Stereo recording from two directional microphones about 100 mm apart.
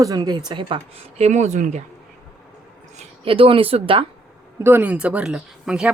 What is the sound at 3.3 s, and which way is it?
Speech, 65° right (ahead or behind).